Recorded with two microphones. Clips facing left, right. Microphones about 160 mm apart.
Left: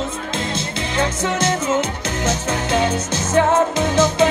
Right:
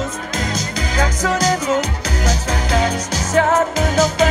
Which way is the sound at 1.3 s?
35° right (ahead or behind).